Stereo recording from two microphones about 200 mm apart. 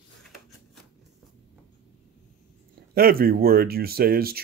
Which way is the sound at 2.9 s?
50° right (ahead or behind).